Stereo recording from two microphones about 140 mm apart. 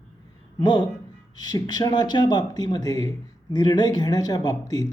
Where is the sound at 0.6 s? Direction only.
30° left (ahead or behind).